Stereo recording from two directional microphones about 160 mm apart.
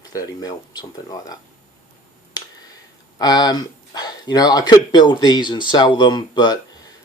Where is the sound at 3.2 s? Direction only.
25° left (ahead or behind).